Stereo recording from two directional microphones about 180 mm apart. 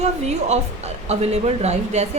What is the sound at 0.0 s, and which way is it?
A woman's voice, 40° right (ahead or behind).